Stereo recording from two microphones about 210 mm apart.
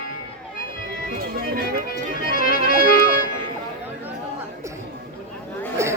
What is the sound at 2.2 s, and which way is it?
Music, 40° left (ahead or behind).